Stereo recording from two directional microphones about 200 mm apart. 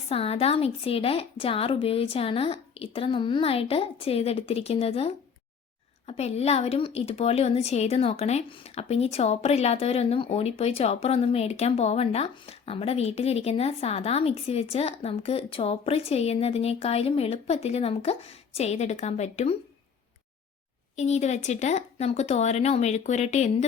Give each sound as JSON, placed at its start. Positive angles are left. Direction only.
{"t": 0.1, "sound": "a woman's voice", "side_deg": 30}
{"t": 20.9, "sound": "a woman's voice", "side_deg": 35}